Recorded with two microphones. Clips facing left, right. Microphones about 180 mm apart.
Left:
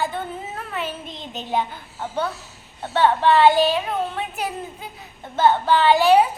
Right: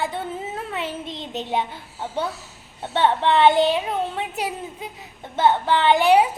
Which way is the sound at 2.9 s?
20° right (ahead or behind).